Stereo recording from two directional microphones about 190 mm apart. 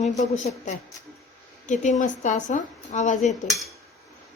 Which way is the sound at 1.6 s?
40° left (ahead or behind).